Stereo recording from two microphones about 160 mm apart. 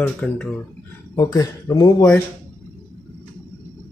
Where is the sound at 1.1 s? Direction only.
25° left (ahead or behind).